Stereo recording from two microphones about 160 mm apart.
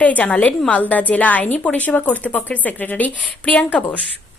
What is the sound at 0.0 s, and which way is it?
A woman's voice, 10° left (ahead or behind).